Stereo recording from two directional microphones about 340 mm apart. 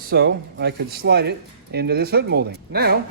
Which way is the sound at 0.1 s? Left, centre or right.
Right.